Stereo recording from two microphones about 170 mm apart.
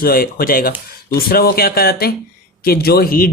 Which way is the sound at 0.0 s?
60° left (ahead or behind).